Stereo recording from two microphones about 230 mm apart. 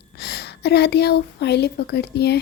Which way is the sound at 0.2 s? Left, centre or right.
Left.